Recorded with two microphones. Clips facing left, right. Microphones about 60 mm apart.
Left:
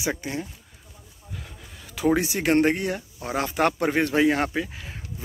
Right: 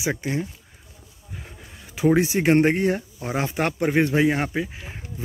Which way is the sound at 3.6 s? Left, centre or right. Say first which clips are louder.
Right 1 dB; centre.